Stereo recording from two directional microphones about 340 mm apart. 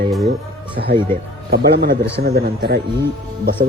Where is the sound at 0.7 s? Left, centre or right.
Right.